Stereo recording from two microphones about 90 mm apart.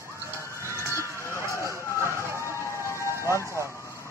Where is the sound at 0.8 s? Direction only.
30° left (ahead or behind).